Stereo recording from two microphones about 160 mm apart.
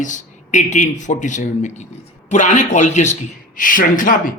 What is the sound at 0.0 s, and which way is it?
A man's voice, 50° left (ahead or behind).